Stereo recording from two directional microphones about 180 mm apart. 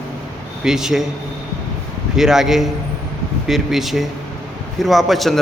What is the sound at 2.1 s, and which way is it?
A man's voice, centre (ahead or behind).